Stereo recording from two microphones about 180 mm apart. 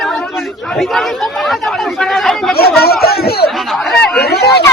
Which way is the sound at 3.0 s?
60° left (ahead or behind).